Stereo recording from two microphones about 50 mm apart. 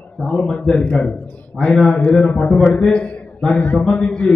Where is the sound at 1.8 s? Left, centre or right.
Left.